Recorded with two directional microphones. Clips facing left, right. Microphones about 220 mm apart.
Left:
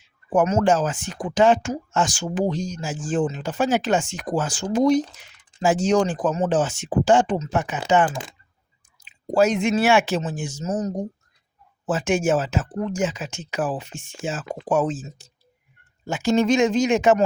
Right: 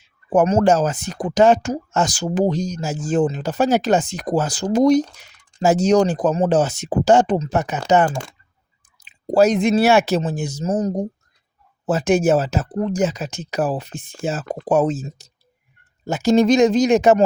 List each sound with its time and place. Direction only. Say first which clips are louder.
0.3 s speech: right 3 dB; 35° right (ahead or behind)